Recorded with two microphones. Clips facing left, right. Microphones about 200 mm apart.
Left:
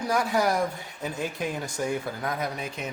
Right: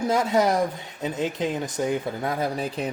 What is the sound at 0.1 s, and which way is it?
Speech, 20° right (ahead or behind).